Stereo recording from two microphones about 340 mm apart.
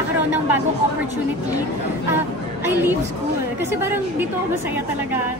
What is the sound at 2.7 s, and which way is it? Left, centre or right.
A woman's voice, centre.